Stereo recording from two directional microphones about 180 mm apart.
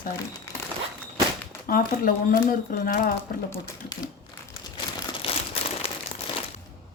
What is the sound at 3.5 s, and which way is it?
Speech, 20° left (ahead or behind).